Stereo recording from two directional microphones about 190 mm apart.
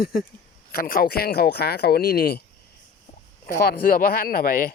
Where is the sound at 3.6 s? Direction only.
50° left (ahead or behind).